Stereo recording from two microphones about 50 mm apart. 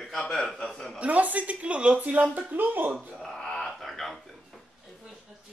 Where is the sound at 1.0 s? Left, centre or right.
Right.